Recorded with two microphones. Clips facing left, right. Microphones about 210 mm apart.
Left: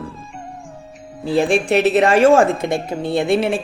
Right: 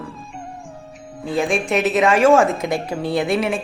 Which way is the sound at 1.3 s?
35° left (ahead or behind).